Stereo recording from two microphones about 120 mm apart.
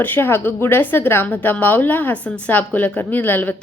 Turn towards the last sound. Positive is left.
turn(degrees=15)  # may be behind; listen again after turning